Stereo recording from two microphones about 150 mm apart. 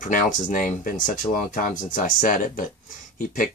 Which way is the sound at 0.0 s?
65° left (ahead or behind).